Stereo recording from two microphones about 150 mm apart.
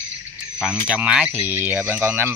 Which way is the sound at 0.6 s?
5° right (ahead or behind).